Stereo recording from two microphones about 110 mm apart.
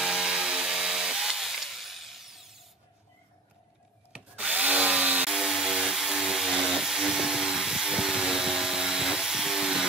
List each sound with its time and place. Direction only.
0.0 s chainsaw: 5° right (ahead or behind)
4.1 s drill: 10° right (ahead or behind)